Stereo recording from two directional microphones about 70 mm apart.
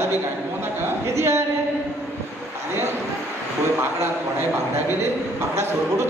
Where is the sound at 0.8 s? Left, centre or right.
Right.